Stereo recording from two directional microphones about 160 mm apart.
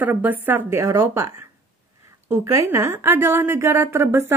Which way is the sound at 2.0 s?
15° right (ahead or behind).